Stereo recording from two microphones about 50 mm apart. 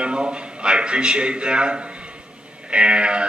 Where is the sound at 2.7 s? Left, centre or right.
Right.